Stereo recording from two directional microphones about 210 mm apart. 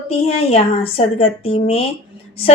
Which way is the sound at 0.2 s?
30° left (ahead or behind).